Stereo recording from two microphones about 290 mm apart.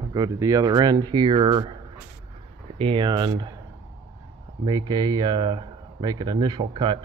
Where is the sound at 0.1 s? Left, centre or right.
Centre.